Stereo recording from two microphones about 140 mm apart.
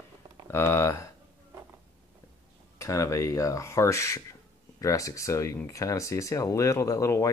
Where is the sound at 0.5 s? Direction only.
15° left (ahead or behind).